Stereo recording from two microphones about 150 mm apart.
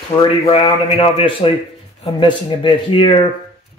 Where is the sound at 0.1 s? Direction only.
35° left (ahead or behind).